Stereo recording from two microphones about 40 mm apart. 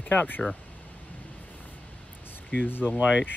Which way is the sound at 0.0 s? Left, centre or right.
Left.